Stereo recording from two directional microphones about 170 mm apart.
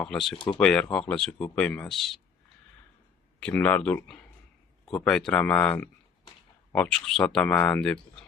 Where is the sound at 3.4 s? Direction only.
10° left (ahead or behind).